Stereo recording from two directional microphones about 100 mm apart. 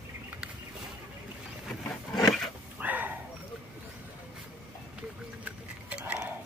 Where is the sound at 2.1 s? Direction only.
Centre (ahead or behind).